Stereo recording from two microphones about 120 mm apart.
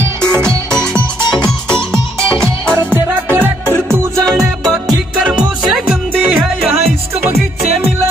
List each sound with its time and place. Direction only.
0.2 s music: 5° left (ahead or behind)
1.9 s music: 5° left (ahead or behind)
2.9 s music: 15° right (ahead or behind)
4.3 s music: centre (ahead or behind)